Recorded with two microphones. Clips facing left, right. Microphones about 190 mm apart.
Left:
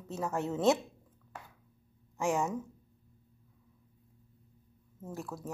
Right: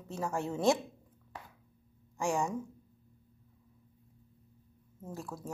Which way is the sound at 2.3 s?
Centre (ahead or behind).